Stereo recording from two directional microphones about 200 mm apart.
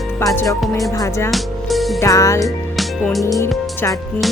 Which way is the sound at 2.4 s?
Centre (ahead or behind).